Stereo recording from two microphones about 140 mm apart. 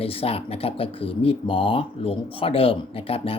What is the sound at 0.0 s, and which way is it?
Speech, 45° left (ahead or behind).